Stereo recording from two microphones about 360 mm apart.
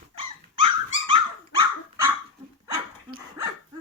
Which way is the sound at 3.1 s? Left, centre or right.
Centre.